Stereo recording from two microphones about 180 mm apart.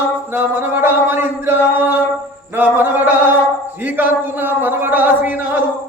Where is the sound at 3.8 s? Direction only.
10° right (ahead or behind).